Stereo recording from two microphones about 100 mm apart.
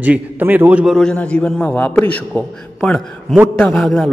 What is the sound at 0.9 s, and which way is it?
A man's voice, 5° left (ahead or behind).